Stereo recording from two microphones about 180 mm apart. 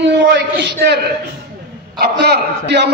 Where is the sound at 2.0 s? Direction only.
65° right (ahead or behind).